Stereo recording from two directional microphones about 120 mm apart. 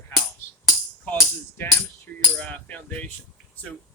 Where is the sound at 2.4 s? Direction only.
10° left (ahead or behind).